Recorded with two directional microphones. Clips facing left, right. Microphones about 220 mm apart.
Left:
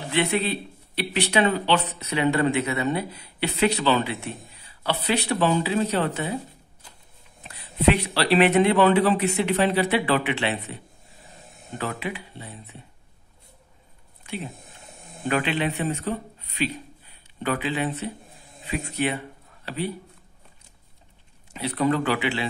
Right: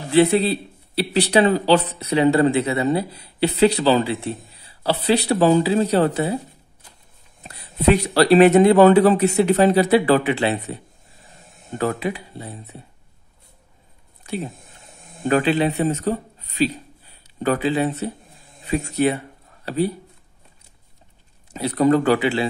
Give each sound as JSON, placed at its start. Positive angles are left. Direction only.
{"t": 0.1, "sound": "speech", "side_deg": -35}
{"t": 7.4, "sound": "speech", "side_deg": -40}
{"t": 11.8, "sound": "speech", "side_deg": -40}
{"t": 14.2, "sound": "a sound", "side_deg": -40}
{"t": 15.2, "sound": "a man's voice", "side_deg": -40}
{"t": 21.5, "sound": "speech", "side_deg": -40}